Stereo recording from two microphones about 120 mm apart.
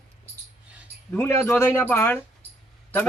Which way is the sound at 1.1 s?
20° left (ahead or behind).